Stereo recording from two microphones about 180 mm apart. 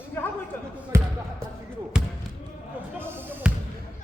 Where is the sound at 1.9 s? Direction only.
5° right (ahead or behind).